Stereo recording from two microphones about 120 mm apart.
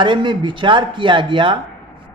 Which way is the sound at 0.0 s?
40° right (ahead or behind).